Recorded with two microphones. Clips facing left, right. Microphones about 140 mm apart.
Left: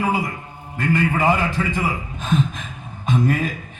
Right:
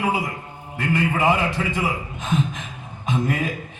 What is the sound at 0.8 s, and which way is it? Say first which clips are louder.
A man's voice: left 2 dB; 15° right (ahead or behind).